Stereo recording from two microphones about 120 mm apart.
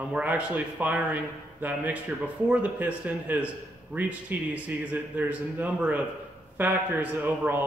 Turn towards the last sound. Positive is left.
turn(degrees=-15)  # may be behind; listen again after turning